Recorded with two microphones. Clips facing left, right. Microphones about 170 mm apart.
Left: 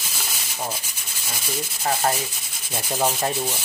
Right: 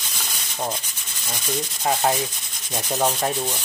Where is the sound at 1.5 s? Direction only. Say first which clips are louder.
Right 2 dB; 5° left (ahead or behind).